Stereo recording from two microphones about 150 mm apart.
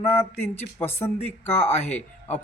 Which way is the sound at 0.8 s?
15° left (ahead or behind).